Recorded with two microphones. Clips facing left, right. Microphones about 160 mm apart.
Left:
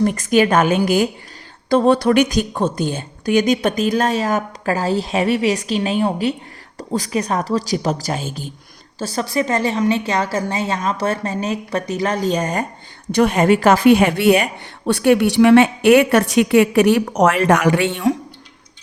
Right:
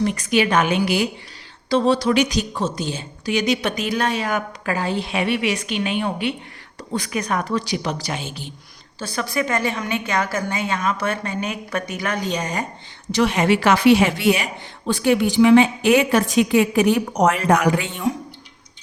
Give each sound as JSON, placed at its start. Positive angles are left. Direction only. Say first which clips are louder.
{"t": 0.0, "sound": "a woman's voice", "louder": "left 4 dB", "side_deg": 45}
{"t": 17.2, "sound": "speech", "louder": "left 3 dB", "side_deg": 85}